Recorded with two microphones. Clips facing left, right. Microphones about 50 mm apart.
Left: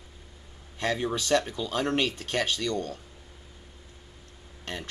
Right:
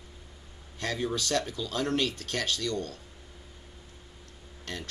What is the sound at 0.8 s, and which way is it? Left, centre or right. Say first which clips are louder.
Speech: left 3 dB; left.